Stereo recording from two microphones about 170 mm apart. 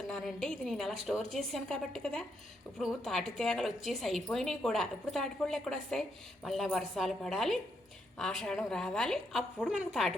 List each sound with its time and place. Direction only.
0.1 s a woman's voice: 5° left (ahead or behind)